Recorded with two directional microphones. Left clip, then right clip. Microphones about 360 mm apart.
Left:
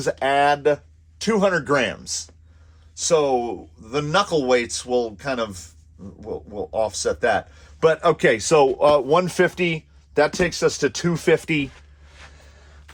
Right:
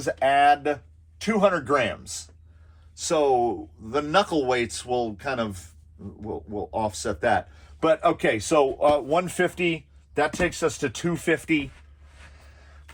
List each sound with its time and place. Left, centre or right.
0.0 s speech: left
6.7 s speech: centre